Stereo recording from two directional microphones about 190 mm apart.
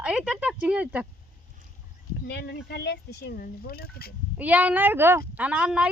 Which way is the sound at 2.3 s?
65° left (ahead or behind).